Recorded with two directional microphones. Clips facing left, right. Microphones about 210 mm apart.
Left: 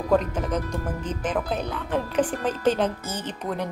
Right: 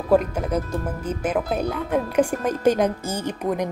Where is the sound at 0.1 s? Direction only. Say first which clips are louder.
Right 4 dB; 10° right (ahead or behind).